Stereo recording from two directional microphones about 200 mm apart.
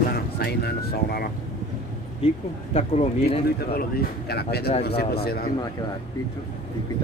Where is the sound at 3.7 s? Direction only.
50° left (ahead or behind).